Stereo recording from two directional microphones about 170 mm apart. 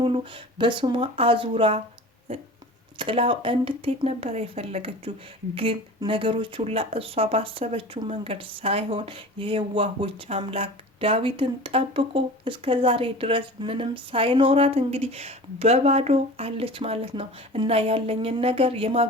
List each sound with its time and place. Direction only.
0.0 s speech: 30° right (ahead or behind)